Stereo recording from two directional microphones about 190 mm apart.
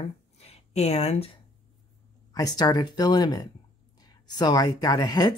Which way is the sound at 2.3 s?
20° left (ahead or behind).